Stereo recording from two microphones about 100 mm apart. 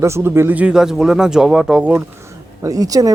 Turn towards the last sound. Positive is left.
turn(degrees=-35)  # may be behind; listen again after turning